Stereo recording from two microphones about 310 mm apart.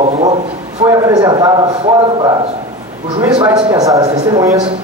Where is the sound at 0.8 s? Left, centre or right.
Centre.